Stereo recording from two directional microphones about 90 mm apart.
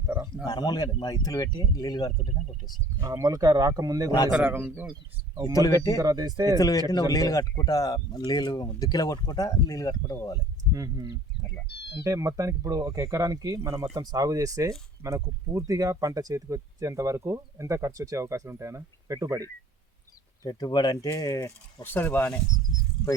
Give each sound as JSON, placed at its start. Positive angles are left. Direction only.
{"t": 0.4, "sound": "speech", "side_deg": 50}
{"t": 3.0, "sound": "speech", "side_deg": -40}
{"t": 5.5, "sound": "speech", "side_deg": 40}
{"t": 6.0, "sound": "speech", "side_deg": -45}
{"t": 6.6, "sound": "speech", "side_deg": 40}
{"t": 10.7, "sound": "speech", "side_deg": -40}
{"t": 20.4, "sound": "speech", "side_deg": 50}
{"t": 21.2, "sound": "speech", "side_deg": 40}
{"t": 21.8, "sound": "speech", "side_deg": 20}